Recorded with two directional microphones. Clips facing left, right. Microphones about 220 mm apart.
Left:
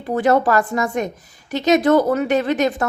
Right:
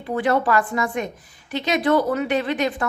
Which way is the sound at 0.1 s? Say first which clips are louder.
Left 4 dB; 40° left (ahead or behind).